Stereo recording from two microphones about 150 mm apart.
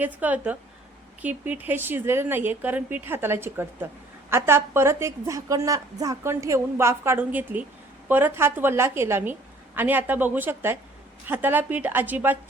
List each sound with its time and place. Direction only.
0.0 s a woman's voice: 10° right (ahead or behind)